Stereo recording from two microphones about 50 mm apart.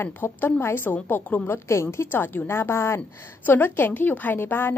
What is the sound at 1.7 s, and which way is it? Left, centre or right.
Speech, left.